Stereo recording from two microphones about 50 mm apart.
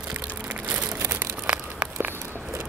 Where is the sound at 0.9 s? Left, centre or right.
Right.